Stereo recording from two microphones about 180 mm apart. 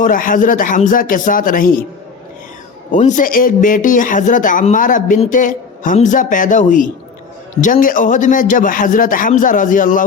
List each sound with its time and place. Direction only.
0.0 s speech: 50° left (ahead or behind)
2.9 s speech: 45° left (ahead or behind)